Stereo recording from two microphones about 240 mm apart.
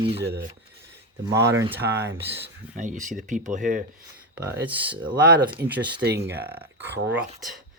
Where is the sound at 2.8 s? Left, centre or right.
Right.